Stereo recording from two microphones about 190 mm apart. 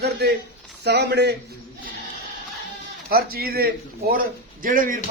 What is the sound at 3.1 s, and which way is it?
Speech, 50° right (ahead or behind).